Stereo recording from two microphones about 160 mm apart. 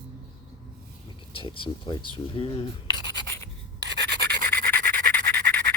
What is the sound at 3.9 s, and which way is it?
Rub, 90° right.